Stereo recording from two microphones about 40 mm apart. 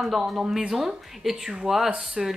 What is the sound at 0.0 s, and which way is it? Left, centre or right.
Speech, centre.